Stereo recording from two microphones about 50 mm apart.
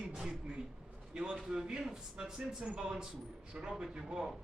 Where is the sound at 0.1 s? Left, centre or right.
Centre.